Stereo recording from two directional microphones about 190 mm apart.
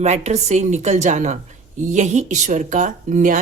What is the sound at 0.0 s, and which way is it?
Speech, 35° right (ahead or behind).